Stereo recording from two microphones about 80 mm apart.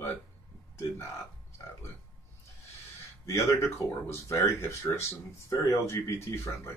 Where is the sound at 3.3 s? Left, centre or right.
Left.